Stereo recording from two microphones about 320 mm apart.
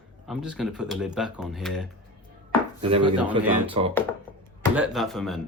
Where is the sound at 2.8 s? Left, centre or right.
Centre.